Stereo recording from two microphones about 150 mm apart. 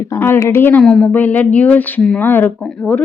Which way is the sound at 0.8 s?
5° left (ahead or behind).